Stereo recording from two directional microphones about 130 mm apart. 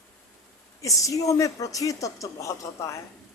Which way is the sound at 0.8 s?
25° left (ahead or behind).